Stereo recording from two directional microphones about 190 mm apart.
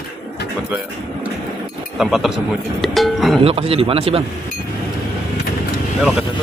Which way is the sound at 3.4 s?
30° right (ahead or behind).